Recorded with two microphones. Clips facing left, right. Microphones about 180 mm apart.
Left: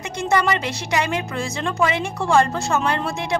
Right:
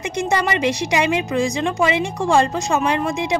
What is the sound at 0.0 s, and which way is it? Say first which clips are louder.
A woman's voice: even; 15° right (ahead or behind).